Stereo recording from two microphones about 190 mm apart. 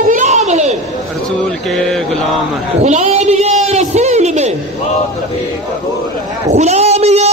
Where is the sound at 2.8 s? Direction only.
35° right (ahead or behind).